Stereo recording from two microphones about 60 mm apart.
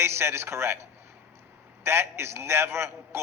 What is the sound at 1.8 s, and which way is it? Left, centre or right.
A man's voice, right.